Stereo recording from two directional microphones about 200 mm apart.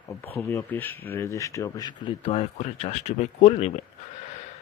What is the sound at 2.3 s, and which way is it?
Speech, 35° left (ahead or behind).